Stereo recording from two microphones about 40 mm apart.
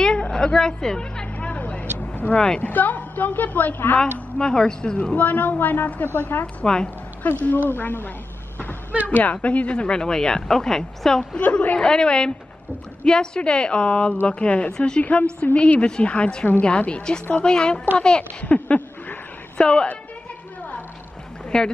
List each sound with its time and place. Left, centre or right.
0.0 s a sound: centre
1.5 s vehicle: left
2.3 s speech: centre
2.6 s a woman's voice: left
4.4 s speech: centre
5.1 s a woman's voice: left
6.0 s a woman's voice: left
6.4 s a woman's voice: left
7.2 s a woman's voice: left
9.0 s a woman's voice: left; by 11.2 s centre
11.3 s speech: left
18.4 s a sound: left
21.5 s a woman's voice: centre